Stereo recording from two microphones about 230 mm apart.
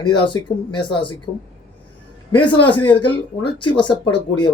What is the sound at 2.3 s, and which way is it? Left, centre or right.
Speech, left.